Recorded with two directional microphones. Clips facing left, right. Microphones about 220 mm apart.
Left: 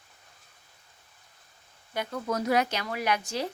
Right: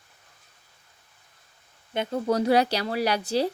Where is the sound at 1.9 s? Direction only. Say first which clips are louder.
Right 6 dB; 25° right (ahead or behind).